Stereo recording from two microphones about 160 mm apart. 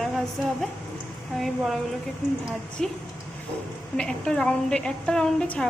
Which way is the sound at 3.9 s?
5° left (ahead or behind).